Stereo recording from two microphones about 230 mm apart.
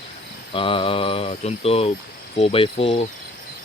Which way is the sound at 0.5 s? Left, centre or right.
Left.